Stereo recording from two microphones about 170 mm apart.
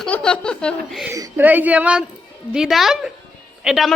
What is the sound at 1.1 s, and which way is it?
A woman's voice, 15° right (ahead or behind).